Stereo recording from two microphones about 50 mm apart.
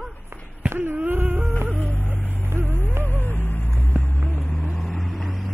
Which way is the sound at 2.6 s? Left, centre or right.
Left.